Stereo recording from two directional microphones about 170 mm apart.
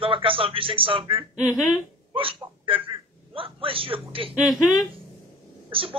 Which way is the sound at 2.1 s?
30° right (ahead or behind).